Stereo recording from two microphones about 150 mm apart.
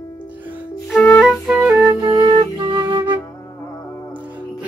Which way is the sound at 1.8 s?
25° right (ahead or behind).